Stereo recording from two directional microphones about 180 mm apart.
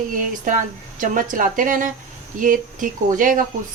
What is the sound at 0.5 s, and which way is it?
A woman's voice, 45° right (ahead or behind).